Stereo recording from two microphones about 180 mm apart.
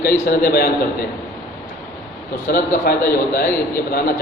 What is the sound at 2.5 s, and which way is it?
Speech, 55° left (ahead or behind).